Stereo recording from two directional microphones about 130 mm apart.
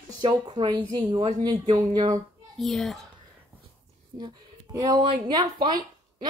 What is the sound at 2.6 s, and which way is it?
Speech, centre (ahead or behind).